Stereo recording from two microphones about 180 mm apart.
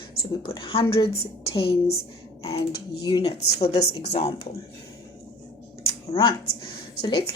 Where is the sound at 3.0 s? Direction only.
25° left (ahead or behind).